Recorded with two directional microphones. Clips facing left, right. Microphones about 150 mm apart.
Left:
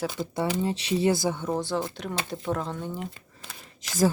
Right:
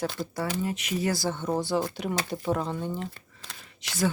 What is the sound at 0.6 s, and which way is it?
Speech, 30° left (ahead or behind).